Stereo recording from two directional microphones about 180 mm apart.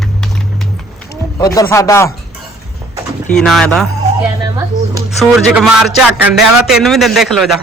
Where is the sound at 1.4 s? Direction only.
20° left (ahead or behind).